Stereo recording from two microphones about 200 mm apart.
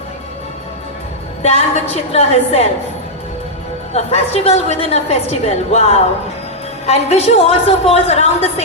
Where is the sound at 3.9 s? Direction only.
30° left (ahead or behind).